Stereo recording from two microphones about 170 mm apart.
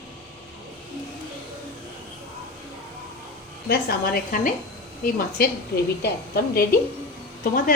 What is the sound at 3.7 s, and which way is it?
A woman's voice, 60° left (ahead or behind).